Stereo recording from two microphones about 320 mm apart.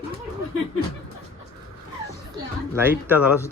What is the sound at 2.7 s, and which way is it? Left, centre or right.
Speech, centre.